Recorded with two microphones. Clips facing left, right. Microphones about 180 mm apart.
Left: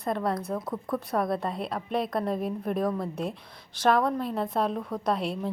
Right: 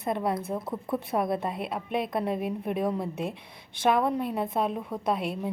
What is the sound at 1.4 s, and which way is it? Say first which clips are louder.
A woman's voice: even; 5° right (ahead or behind).